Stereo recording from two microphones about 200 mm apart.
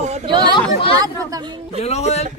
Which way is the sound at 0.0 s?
35° right (ahead or behind).